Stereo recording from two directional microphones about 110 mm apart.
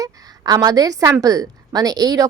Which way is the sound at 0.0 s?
35° right (ahead or behind).